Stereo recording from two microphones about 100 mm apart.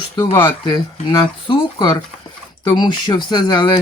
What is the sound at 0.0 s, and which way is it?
Speech, 50° left (ahead or behind).